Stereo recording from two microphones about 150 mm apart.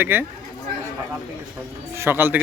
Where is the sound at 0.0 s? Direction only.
15° right (ahead or behind).